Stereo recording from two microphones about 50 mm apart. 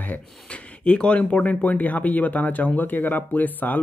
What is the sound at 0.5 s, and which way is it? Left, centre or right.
Speech, left.